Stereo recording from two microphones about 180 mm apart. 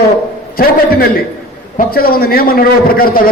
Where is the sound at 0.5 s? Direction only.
55° left (ahead or behind).